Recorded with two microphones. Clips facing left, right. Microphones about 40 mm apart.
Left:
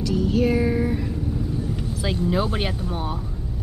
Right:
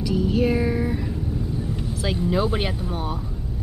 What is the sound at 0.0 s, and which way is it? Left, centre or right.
Music, centre.